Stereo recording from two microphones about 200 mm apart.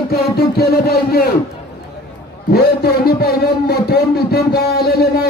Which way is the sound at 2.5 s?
50° left (ahead or behind).